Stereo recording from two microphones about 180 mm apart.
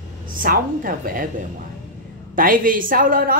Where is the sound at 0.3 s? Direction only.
50° right (ahead or behind).